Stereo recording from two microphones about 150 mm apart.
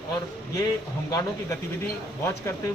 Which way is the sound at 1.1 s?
25° left (ahead or behind).